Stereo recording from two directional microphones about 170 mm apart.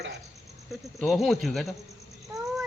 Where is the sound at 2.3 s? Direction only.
Centre (ahead or behind).